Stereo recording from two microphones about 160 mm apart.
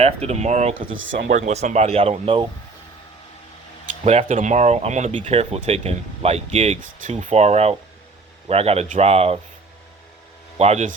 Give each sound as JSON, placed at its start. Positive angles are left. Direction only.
{"t": 0.0, "sound": "speech", "side_deg": -40}
{"t": 4.0, "sound": "speech", "side_deg": -45}
{"t": 10.6, "sound": "speech", "side_deg": -45}